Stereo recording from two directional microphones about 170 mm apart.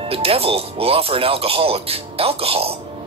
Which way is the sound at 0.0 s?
35° right (ahead or behind).